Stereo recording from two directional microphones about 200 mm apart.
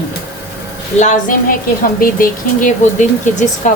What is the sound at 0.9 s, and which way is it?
A woman's voice, 40° left (ahead or behind).